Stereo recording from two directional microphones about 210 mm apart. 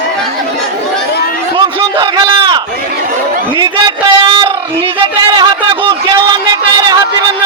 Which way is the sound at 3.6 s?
20° right (ahead or behind).